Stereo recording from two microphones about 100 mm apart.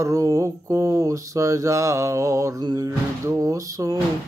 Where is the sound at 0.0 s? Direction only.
30° right (ahead or behind).